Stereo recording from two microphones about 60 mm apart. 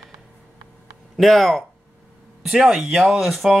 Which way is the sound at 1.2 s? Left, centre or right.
Centre.